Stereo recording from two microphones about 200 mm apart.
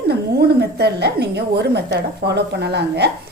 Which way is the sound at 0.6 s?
55° right (ahead or behind).